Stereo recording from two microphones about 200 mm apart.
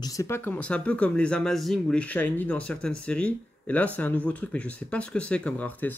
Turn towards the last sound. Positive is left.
turn(degrees=10)  # may be behind; listen again after turning